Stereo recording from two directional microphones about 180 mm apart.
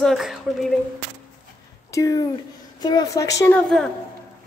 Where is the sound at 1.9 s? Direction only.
20° left (ahead or behind).